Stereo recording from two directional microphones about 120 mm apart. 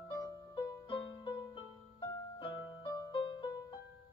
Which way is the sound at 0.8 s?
40° left (ahead or behind).